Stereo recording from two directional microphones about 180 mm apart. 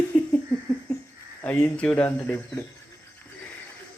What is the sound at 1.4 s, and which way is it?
Speech, 10° left (ahead or behind).